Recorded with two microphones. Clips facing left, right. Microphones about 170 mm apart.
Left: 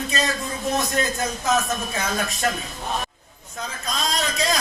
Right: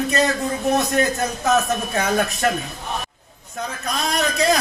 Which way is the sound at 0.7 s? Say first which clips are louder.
Right 4 dB; 65° right (ahead or behind).